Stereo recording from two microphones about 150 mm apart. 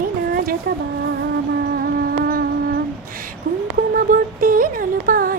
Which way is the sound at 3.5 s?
55° right (ahead or behind).